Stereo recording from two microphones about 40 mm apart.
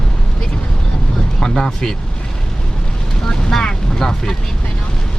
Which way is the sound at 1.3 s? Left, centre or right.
Centre.